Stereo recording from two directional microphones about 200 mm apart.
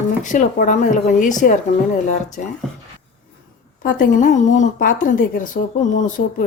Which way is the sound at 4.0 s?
40° left (ahead or behind).